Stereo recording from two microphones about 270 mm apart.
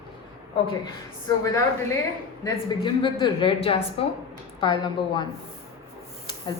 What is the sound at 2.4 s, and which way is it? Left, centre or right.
A woman's voice, centre.